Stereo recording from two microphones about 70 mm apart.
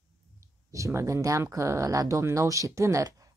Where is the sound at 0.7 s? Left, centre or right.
Right.